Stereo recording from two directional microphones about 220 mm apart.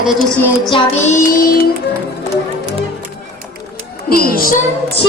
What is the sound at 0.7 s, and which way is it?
Child singing, 25° left (ahead or behind).